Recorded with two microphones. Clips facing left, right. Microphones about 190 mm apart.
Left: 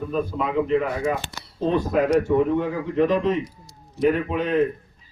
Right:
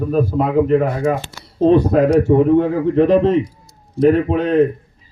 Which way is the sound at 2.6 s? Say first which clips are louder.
Right 7 dB; 25° right (ahead or behind).